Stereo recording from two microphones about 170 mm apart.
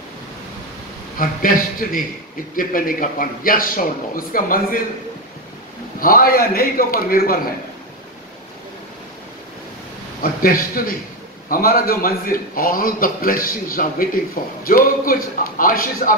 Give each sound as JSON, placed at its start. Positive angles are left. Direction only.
{"t": 1.1, "sound": "a man's voice", "side_deg": 55}
{"t": 5.9, "sound": "a man's voice", "side_deg": 55}
{"t": 10.4, "sound": "a man's voice", "side_deg": 55}